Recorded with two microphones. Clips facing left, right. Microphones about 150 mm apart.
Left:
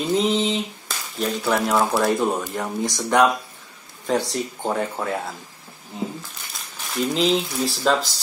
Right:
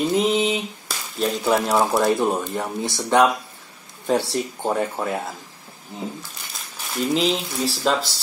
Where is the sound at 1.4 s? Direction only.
20° right (ahead or behind).